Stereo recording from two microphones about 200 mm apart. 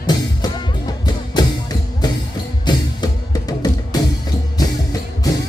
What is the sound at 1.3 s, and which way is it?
Music, 20° left (ahead or behind).